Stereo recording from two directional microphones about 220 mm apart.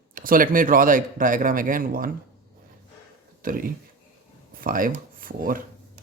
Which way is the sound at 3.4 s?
40° right (ahead or behind).